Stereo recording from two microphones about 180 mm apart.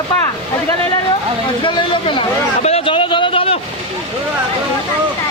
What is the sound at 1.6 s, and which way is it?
A man's voice, 30° left (ahead or behind).